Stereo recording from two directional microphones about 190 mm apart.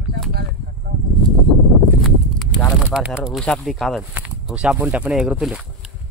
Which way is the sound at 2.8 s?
5° right (ahead or behind).